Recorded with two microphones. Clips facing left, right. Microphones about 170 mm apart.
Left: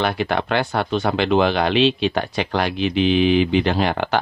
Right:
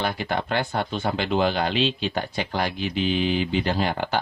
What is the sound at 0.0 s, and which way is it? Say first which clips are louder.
Speech: left 5 dB; 80° left.